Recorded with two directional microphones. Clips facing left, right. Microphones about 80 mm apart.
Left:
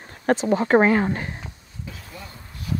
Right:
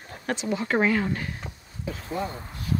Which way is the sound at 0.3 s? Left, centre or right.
Left.